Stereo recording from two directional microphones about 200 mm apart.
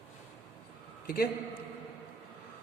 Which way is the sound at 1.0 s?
50° left (ahead or behind).